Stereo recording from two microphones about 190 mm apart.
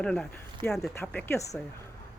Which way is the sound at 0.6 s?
25° right (ahead or behind).